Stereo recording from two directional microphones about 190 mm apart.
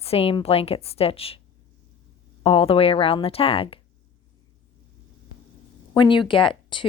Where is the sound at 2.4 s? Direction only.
30° left (ahead or behind).